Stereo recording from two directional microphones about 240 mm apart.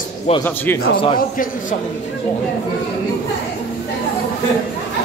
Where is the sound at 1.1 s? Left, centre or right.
Left.